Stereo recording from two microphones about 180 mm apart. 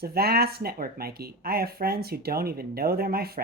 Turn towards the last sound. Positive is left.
turn(degrees=-60)  # may be behind; listen again after turning